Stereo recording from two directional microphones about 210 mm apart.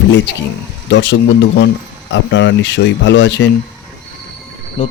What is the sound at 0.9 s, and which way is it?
Speech, 60° left (ahead or behind).